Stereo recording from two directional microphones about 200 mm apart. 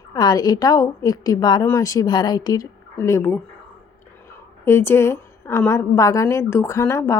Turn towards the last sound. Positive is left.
turn(degrees=15)  # may be behind; listen again after turning